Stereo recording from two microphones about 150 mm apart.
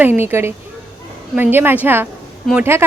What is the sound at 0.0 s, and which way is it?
A woman's voice, 15° right (ahead or behind).